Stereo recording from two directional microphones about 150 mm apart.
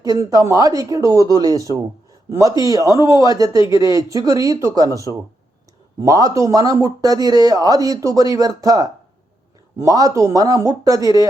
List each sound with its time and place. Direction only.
0.0 s speech: 25° right (ahead or behind)
3.7 s speech: 30° left (ahead or behind)
3.9 s speech: 25° right (ahead or behind)
6.0 s speech: 20° right (ahead or behind)